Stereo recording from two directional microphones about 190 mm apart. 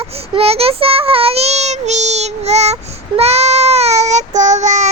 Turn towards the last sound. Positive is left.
turn(degrees=-40)  # may be behind; listen again after turning